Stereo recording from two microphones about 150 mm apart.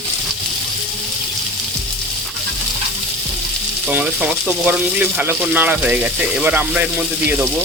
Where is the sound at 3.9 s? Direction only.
5° right (ahead or behind).